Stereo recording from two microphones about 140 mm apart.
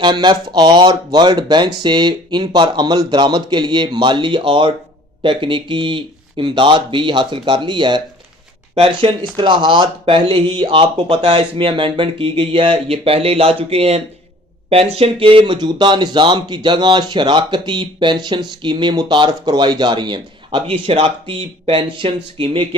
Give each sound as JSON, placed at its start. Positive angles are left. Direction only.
{"t": 0.0, "sound": "speech", "side_deg": -35}